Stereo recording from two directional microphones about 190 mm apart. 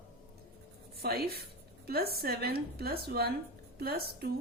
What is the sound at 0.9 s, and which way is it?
A woman's voice, 55° right (ahead or behind).